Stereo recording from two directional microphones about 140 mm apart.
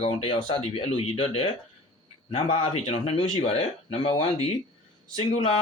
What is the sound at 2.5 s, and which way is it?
Speech, 45° left (ahead or behind).